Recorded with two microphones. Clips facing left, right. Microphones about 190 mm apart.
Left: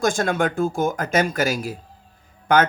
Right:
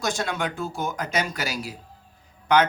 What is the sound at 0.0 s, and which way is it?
Speech, 50° left (ahead or behind).